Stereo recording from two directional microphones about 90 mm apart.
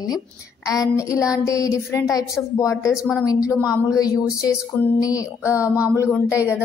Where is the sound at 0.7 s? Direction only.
35° left (ahead or behind).